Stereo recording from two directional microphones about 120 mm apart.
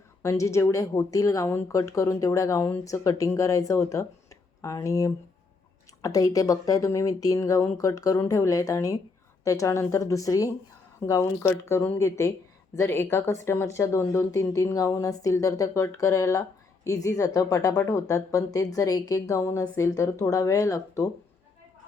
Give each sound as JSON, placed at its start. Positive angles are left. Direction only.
{"t": 0.2, "sound": "speech", "side_deg": 25}